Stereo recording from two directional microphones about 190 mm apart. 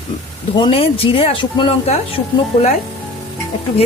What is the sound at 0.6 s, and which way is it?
Speech, 30° left (ahead or behind).